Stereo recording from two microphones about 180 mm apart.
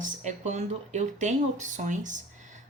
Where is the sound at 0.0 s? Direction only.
45° right (ahead or behind).